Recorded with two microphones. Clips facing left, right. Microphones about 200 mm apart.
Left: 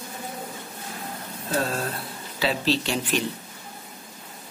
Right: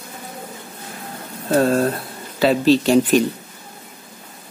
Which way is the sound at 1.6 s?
50° right (ahead or behind).